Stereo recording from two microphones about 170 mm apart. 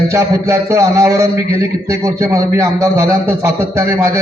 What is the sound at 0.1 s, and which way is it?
A man's voice, 15° right (ahead or behind).